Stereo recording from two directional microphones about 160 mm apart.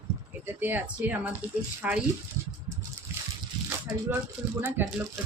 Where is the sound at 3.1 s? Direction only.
15° right (ahead or behind).